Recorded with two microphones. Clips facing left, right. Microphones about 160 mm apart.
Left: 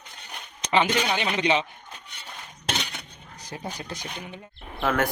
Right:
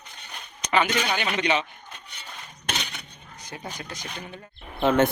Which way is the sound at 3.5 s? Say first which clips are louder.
Left 2 dB; 30° left (ahead or behind).